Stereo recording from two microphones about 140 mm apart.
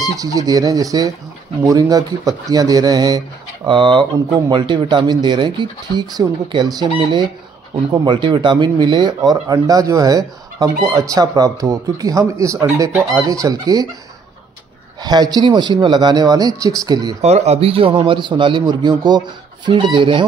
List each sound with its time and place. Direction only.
0.0 s speech: 25° right (ahead or behind)
15.0 s speech: 30° right (ahead or behind)
17.2 s speech: 50° right (ahead or behind)